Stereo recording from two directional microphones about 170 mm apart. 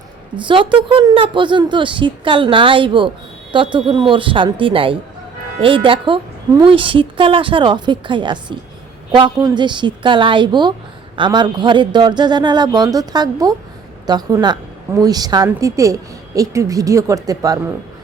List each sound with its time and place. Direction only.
0.3 s a woman's voice: 30° right (ahead or behind)